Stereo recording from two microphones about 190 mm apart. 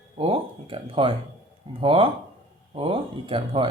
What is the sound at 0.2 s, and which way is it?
Speech, 30° right (ahead or behind).